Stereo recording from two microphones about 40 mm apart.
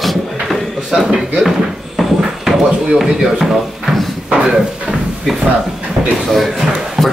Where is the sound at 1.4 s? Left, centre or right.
Centre.